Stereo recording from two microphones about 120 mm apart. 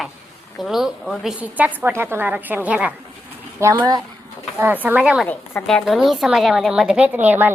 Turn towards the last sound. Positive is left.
turn(degrees=-15)  # may be behind; listen again after turning